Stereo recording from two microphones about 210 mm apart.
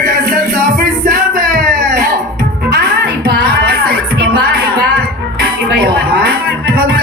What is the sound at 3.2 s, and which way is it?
Music, 45° right (ahead or behind).